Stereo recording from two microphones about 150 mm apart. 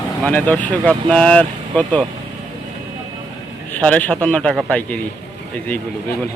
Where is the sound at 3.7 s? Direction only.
10° left (ahead or behind).